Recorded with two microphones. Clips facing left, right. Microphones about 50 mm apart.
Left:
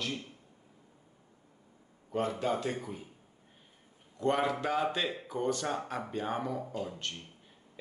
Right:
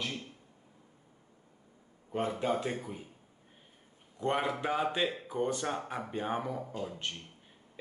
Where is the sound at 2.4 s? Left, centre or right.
Centre.